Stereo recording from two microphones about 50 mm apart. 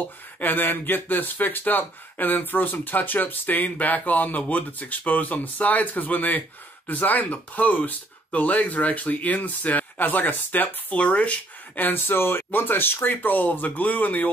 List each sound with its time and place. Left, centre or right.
0.4 s speech: left